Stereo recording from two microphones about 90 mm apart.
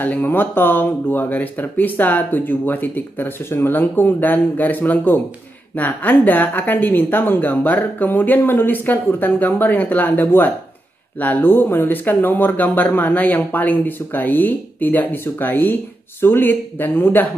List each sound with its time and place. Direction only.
0.0 s speech: 20° left (ahead or behind)